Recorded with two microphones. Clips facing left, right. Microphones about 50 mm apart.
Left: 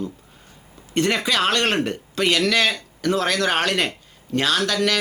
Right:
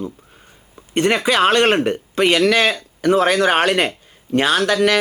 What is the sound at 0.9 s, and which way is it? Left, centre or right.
Speech, right.